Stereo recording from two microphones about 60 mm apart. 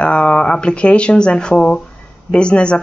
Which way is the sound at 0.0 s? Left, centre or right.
Centre.